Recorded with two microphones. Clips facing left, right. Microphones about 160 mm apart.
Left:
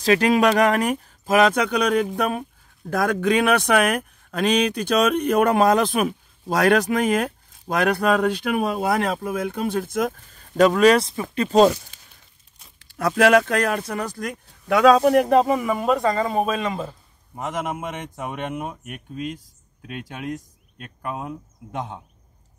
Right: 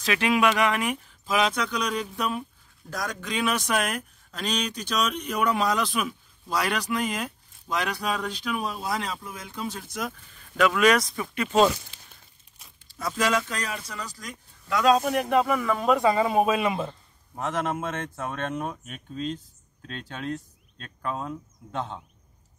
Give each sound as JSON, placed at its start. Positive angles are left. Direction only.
{"t": 0.0, "sound": "speech", "side_deg": 40}
{"t": 12.7, "sound": "speech", "side_deg": 65}
{"t": 15.0, "sound": "speech", "side_deg": 35}
{"t": 15.7, "sound": "speech", "side_deg": 0}
{"t": 17.4, "sound": "speech", "side_deg": 10}